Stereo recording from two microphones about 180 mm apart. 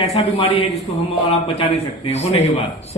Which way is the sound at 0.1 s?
30° left (ahead or behind).